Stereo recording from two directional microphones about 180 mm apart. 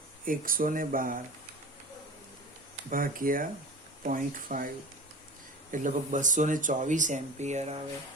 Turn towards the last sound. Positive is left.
turn(degrees=-40)  # may be behind; listen again after turning